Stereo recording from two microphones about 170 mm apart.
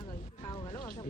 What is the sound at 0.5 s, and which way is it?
Music, 30° left (ahead or behind).